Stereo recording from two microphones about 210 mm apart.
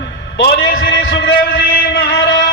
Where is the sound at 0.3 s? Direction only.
50° left (ahead or behind).